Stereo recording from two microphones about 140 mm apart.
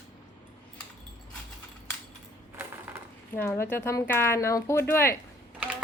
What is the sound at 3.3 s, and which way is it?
Speech, 15° left (ahead or behind).